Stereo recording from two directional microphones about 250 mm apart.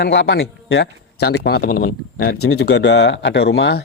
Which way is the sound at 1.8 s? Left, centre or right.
Left.